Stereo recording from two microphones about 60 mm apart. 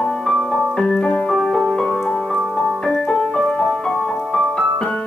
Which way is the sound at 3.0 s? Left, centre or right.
Centre.